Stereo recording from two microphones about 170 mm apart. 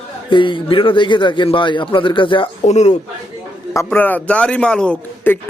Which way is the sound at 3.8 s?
10° left (ahead or behind).